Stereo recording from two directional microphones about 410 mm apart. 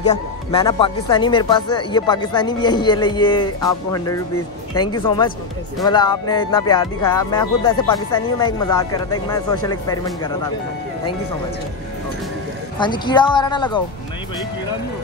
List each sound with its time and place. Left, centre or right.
0.0 s speech: centre
12.7 s speech: centre